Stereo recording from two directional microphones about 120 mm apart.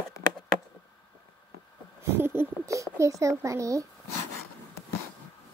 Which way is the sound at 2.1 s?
20° right (ahead or behind).